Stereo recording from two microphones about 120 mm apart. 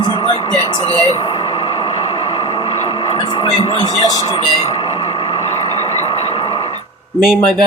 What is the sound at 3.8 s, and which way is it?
Speech, 35° left (ahead or behind).